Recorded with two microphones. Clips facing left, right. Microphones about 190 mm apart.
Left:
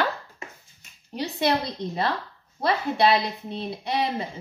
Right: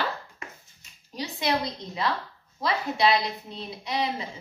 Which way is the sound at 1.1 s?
60° left (ahead or behind).